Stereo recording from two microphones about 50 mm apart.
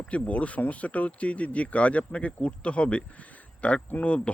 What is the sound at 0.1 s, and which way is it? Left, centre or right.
Speech, left.